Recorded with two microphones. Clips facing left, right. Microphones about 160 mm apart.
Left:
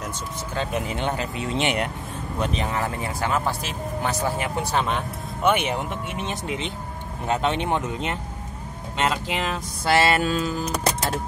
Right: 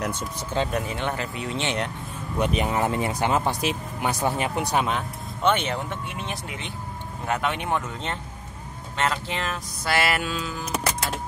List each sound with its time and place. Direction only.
0.7 s speech: 20° left (ahead or behind)
2.4 s speech: 15° right (ahead or behind)
5.4 s speech: 10° left (ahead or behind)
8.9 s speech: 15° left (ahead or behind)
10.2 s speech: 45° left (ahead or behind)